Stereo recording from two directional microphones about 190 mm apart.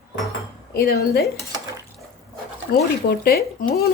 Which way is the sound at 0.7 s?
55° left (ahead or behind).